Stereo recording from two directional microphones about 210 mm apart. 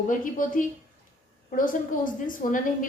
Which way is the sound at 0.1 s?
40° left (ahead or behind).